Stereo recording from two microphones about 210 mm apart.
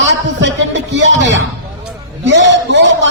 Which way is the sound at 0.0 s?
60° right (ahead or behind).